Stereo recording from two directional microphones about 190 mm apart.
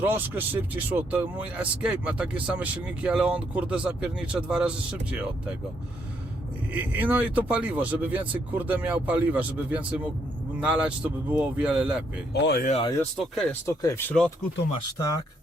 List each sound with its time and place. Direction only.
0.0 s speech: 10° right (ahead or behind)
6.7 s speech: 10° right (ahead or behind)
12.3 s speech: 55° left (ahead or behind)
13.0 s speech: centre (ahead or behind)
13.7 s speech: 15° left (ahead or behind)